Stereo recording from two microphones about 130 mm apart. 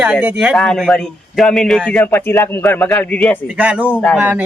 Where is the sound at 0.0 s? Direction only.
10° right (ahead or behind).